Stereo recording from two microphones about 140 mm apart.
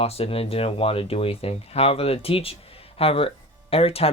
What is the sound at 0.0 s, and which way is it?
Speech, 45° left (ahead or behind).